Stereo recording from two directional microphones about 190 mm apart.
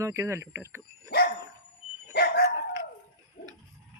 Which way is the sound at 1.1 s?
60° left (ahead or behind).